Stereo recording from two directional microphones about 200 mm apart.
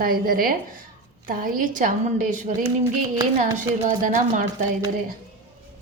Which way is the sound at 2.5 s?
20° right (ahead or behind).